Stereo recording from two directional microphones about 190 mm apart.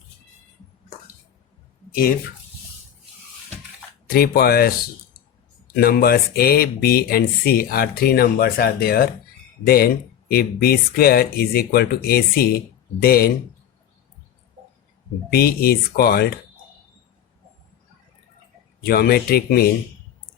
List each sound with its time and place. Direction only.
4.1 s speech: 55° left (ahead or behind)
15.3 s speech: 55° left (ahead or behind)
18.8 s speech: 55° left (ahead or behind)